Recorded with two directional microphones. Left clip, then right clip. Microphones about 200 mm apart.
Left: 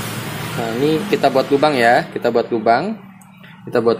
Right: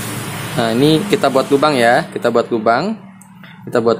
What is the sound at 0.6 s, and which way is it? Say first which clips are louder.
Speech: right 5 dB; 25° right (ahead or behind).